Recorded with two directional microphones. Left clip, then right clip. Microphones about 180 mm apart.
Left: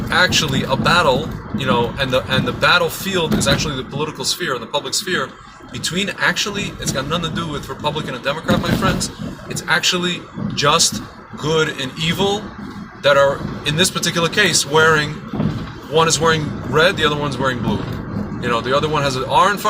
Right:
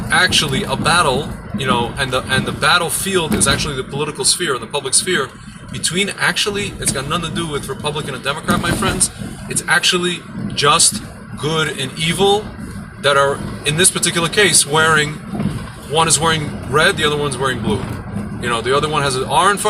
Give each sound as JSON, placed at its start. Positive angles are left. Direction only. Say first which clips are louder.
{"t": 0.1, "sound": "speech", "louder": "right 1 dB", "side_deg": 15}
{"t": 9.6, "sound": "speech", "louder": "right 2 dB", "side_deg": 15}